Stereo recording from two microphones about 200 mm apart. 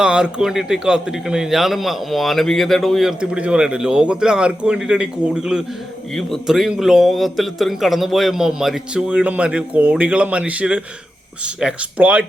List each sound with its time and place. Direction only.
0.0 s a man's voice: 5° right (ahead or behind)